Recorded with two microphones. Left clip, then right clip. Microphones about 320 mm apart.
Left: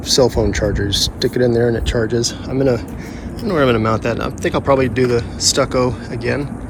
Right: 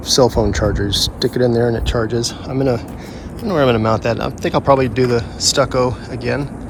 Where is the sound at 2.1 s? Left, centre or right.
Centre.